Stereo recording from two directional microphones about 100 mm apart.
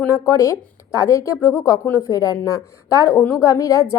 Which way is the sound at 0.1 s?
30° left (ahead or behind).